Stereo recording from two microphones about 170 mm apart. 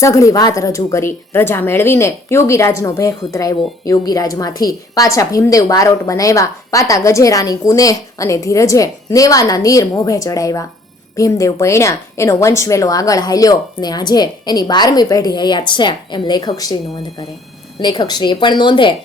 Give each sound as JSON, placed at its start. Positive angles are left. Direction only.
{"t": 0.0, "sound": "speech", "side_deg": 20}
{"t": 17.7, "sound": "speech", "side_deg": 25}